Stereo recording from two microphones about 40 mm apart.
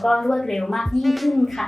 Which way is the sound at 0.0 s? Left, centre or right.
Centre.